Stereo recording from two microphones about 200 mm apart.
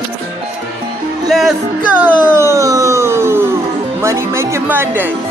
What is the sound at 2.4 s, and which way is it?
Speech, 15° right (ahead or behind).